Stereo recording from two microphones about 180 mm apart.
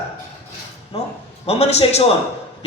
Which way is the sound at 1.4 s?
35° left (ahead or behind).